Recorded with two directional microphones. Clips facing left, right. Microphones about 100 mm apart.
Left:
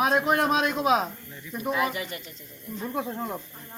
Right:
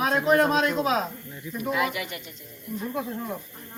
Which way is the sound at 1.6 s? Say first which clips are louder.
Even; 30° left (ahead or behind).